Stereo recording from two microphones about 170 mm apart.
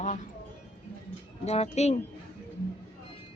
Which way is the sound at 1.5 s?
40° left (ahead or behind).